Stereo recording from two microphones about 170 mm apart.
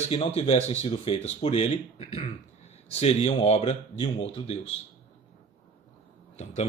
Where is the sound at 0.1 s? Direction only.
35° left (ahead or behind).